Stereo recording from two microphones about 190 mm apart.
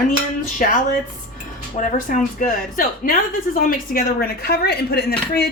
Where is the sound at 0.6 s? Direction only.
50° left (ahead or behind).